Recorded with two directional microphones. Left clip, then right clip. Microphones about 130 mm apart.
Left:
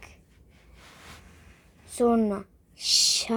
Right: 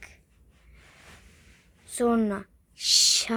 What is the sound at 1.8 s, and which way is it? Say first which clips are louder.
Speech: left 2 dB; 25° right (ahead or behind).